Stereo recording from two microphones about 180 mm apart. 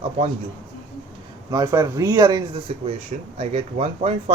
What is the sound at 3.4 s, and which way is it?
Speech, 35° right (ahead or behind).